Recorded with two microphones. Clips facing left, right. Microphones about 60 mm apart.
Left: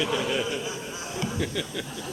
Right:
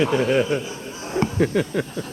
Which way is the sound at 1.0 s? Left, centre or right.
Right.